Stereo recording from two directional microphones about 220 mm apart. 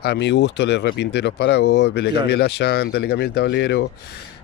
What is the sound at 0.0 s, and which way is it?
Speech, 50° left (ahead or behind).